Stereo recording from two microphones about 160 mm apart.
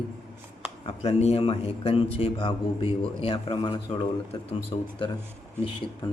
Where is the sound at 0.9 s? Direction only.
40° left (ahead or behind).